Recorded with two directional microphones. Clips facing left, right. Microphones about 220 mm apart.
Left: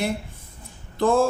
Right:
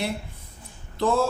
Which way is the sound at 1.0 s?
50° left (ahead or behind).